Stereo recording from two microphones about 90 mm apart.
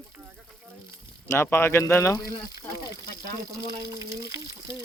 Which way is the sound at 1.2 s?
25° left (ahead or behind).